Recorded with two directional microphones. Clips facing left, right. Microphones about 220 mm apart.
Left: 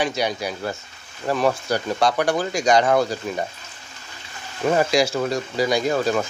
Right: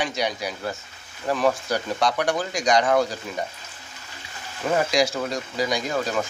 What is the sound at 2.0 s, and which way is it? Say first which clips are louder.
Speech: left 3 dB; 30° left (ahead or behind).